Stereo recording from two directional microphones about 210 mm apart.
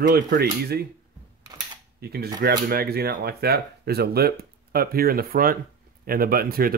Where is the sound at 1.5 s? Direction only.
20° right (ahead or behind).